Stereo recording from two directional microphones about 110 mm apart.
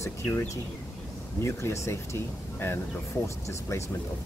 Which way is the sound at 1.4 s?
25° left (ahead or behind).